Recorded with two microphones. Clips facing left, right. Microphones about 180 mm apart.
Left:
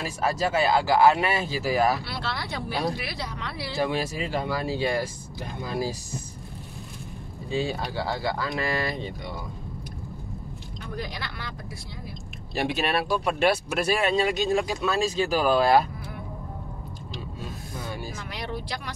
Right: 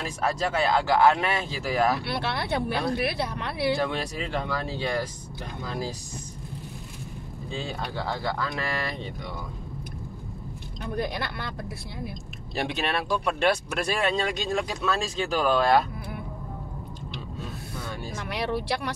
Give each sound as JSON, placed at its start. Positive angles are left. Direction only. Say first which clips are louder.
{"t": 0.0, "sound": "speech", "louder": "left 1 dB", "side_deg": 5}
{"t": 2.0, "sound": "speech", "louder": "right 4 dB", "side_deg": -60}
{"t": 3.8, "sound": "speech", "louder": "left 2 dB", "side_deg": 5}
{"t": 7.5, "sound": "speech", "louder": "left 5 dB", "side_deg": 5}
{"t": 11.0, "sound": "speech", "louder": "right 6 dB", "side_deg": -55}
{"t": 12.5, "sound": "speech", "louder": "left 2 dB", "side_deg": 5}
{"t": 18.3, "sound": "speech", "louder": "right 8 dB", "side_deg": -65}